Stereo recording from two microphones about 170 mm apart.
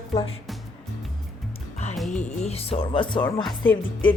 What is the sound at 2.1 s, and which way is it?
Speech, 40° left (ahead or behind).